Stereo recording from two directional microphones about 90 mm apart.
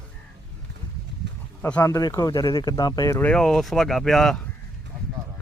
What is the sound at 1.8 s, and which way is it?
Speech, 35° left (ahead or behind).